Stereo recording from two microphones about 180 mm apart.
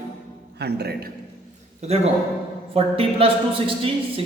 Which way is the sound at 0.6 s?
65° right (ahead or behind).